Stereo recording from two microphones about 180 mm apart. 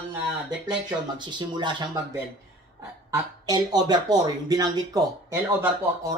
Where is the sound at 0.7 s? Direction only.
25° right (ahead or behind).